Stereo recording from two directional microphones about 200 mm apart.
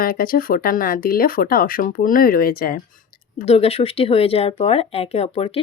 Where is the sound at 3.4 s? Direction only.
30° left (ahead or behind).